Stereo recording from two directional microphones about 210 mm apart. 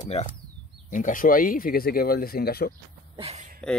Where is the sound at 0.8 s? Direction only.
40° left (ahead or behind).